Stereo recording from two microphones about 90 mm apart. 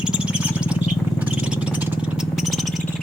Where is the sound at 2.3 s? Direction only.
Centre (ahead or behind).